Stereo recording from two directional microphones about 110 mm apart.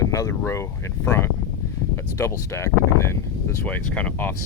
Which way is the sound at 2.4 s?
25° left (ahead or behind).